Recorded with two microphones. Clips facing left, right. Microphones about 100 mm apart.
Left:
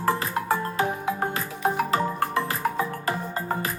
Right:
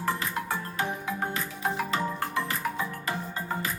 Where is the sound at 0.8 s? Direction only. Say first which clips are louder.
Left 5 dB; 45° left (ahead or behind).